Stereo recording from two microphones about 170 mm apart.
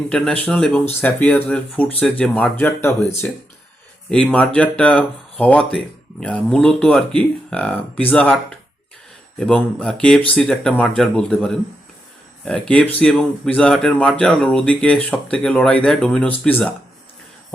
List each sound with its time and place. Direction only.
0.1 s speech: 5° left (ahead or behind)
13.0 s speech: 5° left (ahead or behind)